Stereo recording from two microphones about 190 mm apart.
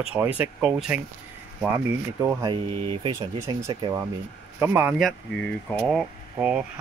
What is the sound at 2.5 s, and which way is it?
Speech, 25° right (ahead or behind).